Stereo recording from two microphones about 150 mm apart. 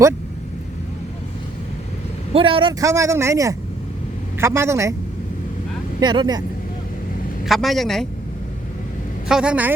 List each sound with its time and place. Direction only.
2.3 s speech: 35° right (ahead or behind)
2.8 s speech: 20° right (ahead or behind)
6.0 s speech: 30° right (ahead or behind)
7.4 s a man's voice: centre (ahead or behind)
9.3 s speech: 5° right (ahead or behind)